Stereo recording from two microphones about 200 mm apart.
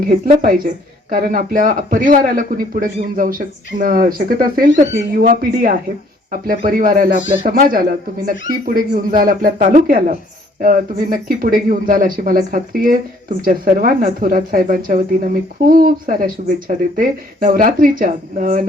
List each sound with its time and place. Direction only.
0.0 s speech: 45° right (ahead or behind)